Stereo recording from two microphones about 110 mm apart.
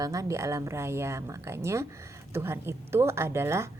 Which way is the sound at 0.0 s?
30° right (ahead or behind).